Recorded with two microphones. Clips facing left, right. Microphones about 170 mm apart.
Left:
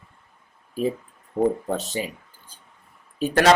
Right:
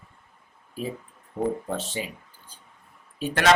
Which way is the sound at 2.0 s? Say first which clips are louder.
Left 4 dB; 40° left (ahead or behind).